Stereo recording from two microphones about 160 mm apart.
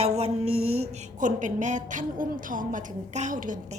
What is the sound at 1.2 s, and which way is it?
A woman's voice, 50° right (ahead or behind).